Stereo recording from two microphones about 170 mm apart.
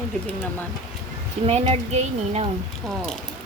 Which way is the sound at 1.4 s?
35° right (ahead or behind).